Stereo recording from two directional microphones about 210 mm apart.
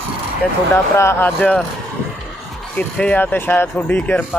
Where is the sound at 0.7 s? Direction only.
10° left (ahead or behind).